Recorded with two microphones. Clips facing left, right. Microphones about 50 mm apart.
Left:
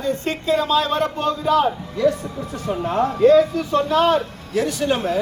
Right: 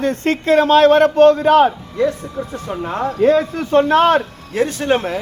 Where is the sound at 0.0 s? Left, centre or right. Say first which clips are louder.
Right 5 dB; right.